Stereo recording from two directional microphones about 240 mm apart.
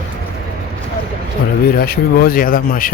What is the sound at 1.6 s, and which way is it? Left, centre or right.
Speech, left.